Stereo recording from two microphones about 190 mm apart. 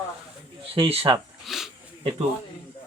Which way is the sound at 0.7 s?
30° right (ahead or behind).